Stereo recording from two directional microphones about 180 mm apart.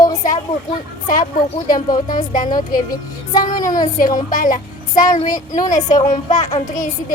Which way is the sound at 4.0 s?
50° left (ahead or behind).